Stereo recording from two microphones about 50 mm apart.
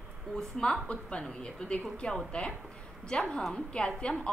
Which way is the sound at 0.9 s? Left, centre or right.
Left.